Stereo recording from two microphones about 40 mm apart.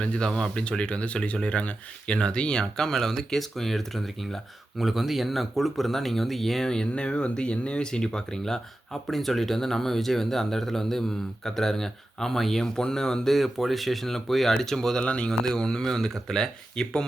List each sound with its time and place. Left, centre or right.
0.0 s speech: left
0.5 s speech: left; by 6.7 s centre
6.7 s speech: left
15.0 s speech: left
15.3 s speech: centre